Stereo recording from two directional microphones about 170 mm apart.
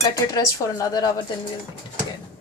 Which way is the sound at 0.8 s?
20° left (ahead or behind).